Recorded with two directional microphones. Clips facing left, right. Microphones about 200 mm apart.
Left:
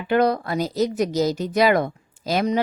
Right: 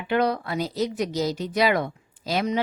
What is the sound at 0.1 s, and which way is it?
Speech, 45° left (ahead or behind).